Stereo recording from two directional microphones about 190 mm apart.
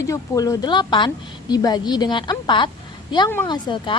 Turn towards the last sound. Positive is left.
turn(degrees=25)  # may be behind; listen again after turning